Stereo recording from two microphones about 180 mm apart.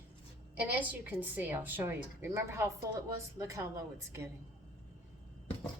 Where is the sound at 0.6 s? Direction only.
10° right (ahead or behind).